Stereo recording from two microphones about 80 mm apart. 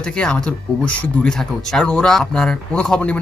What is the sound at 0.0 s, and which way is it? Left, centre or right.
Speech, centre.